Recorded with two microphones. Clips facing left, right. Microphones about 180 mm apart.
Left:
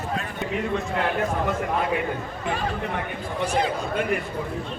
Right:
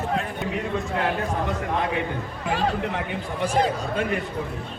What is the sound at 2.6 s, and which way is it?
Speech, 85° right.